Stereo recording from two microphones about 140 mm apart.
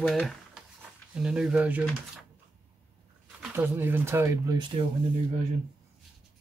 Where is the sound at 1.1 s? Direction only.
5° right (ahead or behind).